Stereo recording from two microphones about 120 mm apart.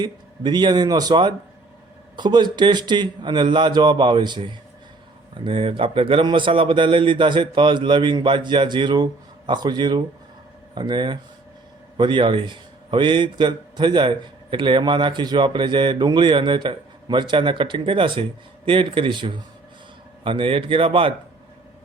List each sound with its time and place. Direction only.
0.0 s a man's voice: 35° right (ahead or behind)